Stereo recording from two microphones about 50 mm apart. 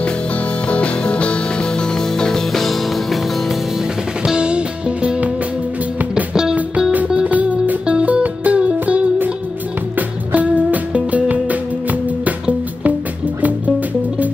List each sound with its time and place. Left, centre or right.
0.7 s music: left; by 3.5 s centre
4.2 s music: centre
7.2 s music: right